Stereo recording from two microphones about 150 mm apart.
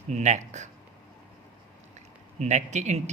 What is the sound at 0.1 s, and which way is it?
Speech, 50° right (ahead or behind).